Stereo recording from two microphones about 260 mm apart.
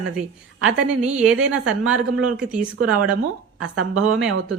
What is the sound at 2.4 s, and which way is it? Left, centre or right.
Speech, centre.